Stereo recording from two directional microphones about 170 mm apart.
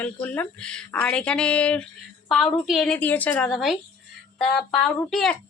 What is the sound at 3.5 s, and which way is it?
A woman's voice, centre (ahead or behind).